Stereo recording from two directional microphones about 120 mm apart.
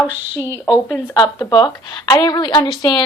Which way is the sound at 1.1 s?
35° left (ahead or behind).